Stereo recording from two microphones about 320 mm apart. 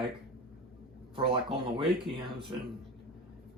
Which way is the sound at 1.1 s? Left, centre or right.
Centre.